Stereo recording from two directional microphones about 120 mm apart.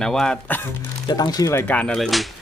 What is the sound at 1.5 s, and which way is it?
Speech, 20° left (ahead or behind).